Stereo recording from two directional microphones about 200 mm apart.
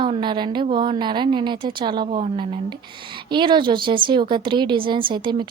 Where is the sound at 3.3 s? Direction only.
25° right (ahead or behind).